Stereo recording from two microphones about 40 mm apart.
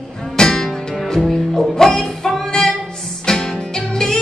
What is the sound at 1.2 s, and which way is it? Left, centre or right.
Music, centre.